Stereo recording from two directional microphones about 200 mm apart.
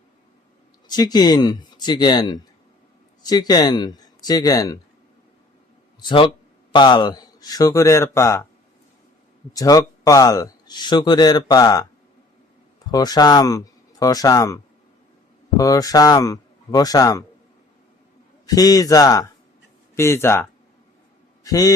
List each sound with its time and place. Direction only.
0.9 s speech: 20° left (ahead or behind)
6.0 s a man's voice: 25° left (ahead or behind)
9.5 s speech: 20° left (ahead or behind)
12.9 s a man's voice: 20° left (ahead or behind)
18.4 s a man's voice: 20° left (ahead or behind)